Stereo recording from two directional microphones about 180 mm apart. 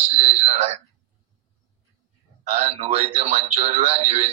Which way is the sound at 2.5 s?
35° right (ahead or behind).